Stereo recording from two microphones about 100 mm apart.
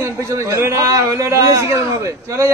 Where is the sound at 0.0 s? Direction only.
30° right (ahead or behind).